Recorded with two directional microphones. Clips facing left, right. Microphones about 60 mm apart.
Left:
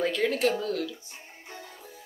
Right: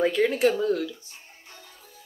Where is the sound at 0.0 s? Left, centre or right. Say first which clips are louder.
Right 4 dB; centre.